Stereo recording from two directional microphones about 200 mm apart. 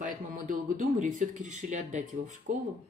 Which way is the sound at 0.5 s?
40° right (ahead or behind).